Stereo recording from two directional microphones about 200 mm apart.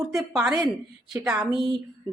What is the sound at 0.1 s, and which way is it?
A woman's voice, 5° right (ahead or behind).